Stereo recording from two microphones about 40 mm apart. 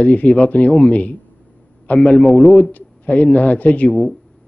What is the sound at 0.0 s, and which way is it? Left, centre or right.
Speech, left.